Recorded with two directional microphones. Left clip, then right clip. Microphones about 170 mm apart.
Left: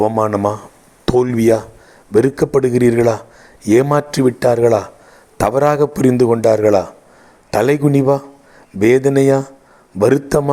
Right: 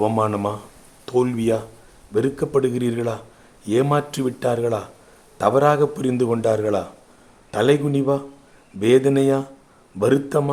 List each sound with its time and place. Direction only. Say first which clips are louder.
0.2 s a man's voice: left 6 dB; 40° left (ahead or behind)